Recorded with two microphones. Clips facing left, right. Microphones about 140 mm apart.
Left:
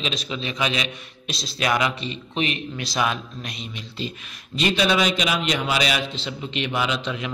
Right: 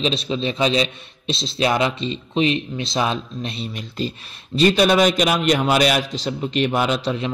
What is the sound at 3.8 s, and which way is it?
A man's voice, 40° right (ahead or behind).